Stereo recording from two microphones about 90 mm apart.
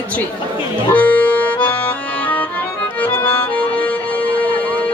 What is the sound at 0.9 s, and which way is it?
Accordion, 15° left (ahead or behind).